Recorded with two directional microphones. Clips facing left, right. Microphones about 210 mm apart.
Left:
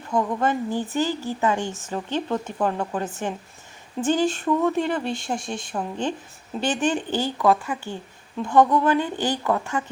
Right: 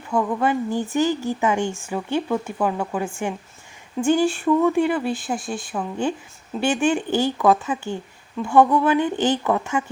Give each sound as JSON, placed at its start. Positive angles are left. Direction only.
{"t": 0.3, "sound": "speech", "side_deg": -10}